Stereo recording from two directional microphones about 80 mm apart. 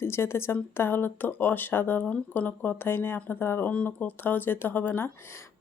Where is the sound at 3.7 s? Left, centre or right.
Centre.